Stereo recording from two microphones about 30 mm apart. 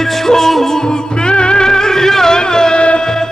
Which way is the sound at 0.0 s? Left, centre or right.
Centre.